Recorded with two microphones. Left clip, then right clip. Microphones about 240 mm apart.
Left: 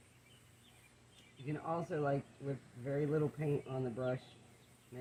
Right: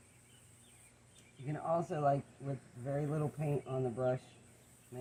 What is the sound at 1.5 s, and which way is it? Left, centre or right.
Speech, centre.